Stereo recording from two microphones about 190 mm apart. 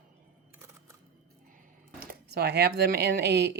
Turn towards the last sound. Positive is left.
turn(degrees=-60)  # may be behind; listen again after turning